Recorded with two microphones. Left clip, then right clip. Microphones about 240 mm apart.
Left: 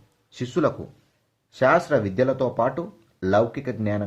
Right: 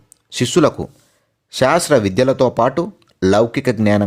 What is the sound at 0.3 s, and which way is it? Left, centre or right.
Speech, right.